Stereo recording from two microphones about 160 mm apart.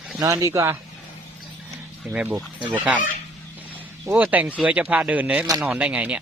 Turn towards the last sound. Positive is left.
turn(degrees=-10)  # may be behind; listen again after turning